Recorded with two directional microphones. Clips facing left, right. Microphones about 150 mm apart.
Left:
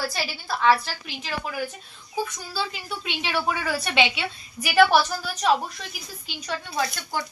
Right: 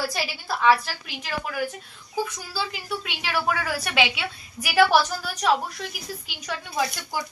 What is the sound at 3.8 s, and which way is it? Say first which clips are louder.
A woman's voice: left 1 dB; 10° right (ahead or behind).